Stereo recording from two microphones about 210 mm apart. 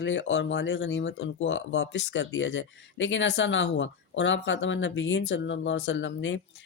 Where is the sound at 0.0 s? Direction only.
60° left (ahead or behind).